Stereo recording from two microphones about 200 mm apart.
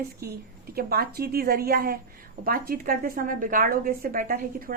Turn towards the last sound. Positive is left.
turn(degrees=-45)  # may be behind; listen again after turning